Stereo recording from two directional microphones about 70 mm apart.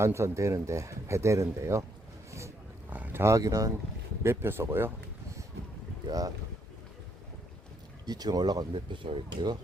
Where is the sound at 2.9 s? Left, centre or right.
Right.